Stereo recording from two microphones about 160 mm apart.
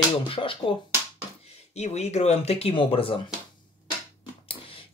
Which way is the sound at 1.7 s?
45° left (ahead or behind).